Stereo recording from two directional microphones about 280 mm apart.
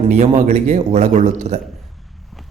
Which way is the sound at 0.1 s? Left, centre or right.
Right.